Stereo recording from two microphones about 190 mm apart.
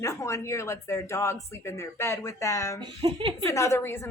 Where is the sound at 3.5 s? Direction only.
15° left (ahead or behind).